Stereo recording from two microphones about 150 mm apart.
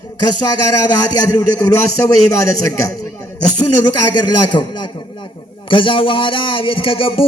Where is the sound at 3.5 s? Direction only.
30° left (ahead or behind).